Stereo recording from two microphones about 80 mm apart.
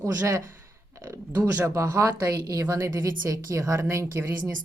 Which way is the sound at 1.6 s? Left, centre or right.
Right.